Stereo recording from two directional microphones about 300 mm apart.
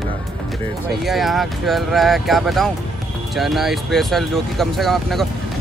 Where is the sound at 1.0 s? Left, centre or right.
Centre.